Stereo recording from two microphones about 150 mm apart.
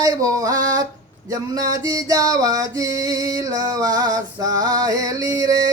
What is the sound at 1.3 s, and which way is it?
Speech, 25° right (ahead or behind).